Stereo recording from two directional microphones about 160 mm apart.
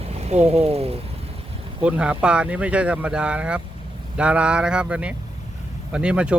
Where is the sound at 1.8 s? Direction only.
5° right (ahead or behind).